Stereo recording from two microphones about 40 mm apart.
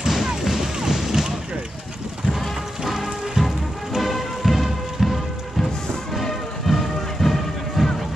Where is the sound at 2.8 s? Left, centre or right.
Centre.